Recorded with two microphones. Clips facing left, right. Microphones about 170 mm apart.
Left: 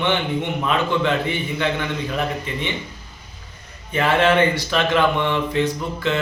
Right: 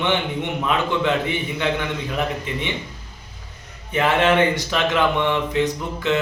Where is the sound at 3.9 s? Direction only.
15° right (ahead or behind).